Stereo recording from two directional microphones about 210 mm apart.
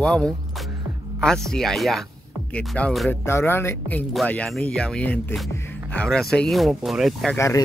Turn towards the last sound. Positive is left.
turn(degrees=0)  # may be behind; listen again after turning